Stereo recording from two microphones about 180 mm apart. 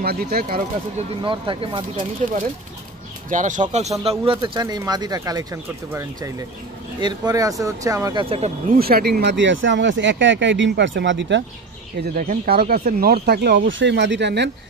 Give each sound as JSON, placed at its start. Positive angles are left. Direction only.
{"t": 0.0, "sound": "speech", "side_deg": -60}
{"t": 0.9, "sound": "speech", "side_deg": -30}
{"t": 3.3, "sound": "speech", "side_deg": -45}
{"t": 4.0, "sound": "speech", "side_deg": -30}
{"t": 8.6, "sound": "speech", "side_deg": -55}
{"t": 12.0, "sound": "speech", "side_deg": -50}